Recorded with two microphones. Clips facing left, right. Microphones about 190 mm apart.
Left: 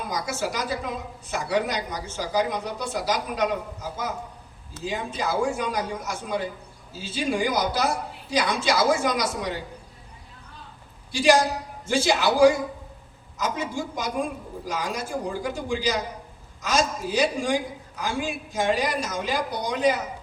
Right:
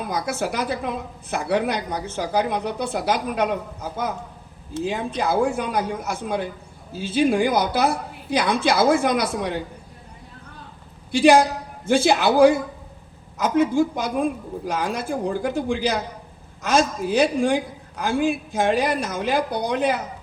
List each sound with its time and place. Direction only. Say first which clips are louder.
0.1 s a woman's voice: right 3 dB; 55° right (ahead or behind)
11.1 s a woman's voice: right 5 dB; 55° right (ahead or behind)